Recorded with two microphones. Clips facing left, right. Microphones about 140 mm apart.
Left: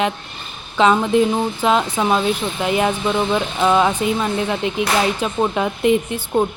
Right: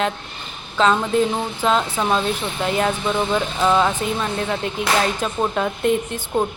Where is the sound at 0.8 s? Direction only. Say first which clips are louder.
Left 3 dB; 10° left (ahead or behind).